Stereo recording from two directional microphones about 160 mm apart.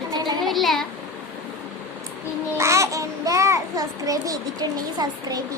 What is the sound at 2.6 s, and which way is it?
Babbling, 20° right (ahead or behind).